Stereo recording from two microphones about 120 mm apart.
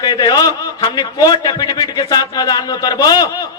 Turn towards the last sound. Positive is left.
turn(degrees=30)  # may be behind; listen again after turning